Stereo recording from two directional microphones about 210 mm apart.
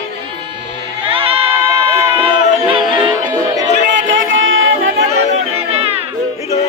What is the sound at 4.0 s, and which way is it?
Music, 65° right (ahead or behind).